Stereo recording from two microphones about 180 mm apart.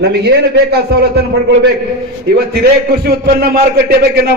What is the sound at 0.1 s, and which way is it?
A man's voice, 65° right (ahead or behind).